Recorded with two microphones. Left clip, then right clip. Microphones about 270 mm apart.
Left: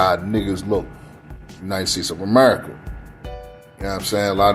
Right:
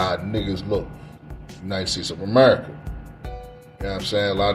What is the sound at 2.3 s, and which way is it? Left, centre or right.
Speech, left.